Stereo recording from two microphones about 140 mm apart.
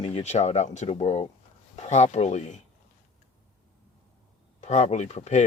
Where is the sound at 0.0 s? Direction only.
50° left (ahead or behind).